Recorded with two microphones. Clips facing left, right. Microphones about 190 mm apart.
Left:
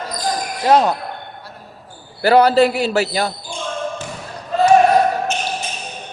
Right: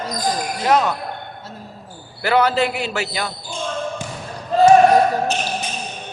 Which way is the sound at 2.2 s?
35° left (ahead or behind).